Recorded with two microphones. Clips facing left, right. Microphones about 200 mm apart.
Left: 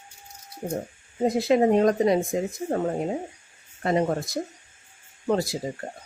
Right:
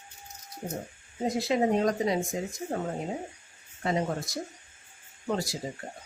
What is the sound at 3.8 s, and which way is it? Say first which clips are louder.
Speech: left 6 dB; 55° left (ahead or behind).